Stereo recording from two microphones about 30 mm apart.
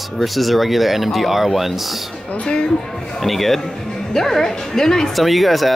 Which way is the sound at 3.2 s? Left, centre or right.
Centre.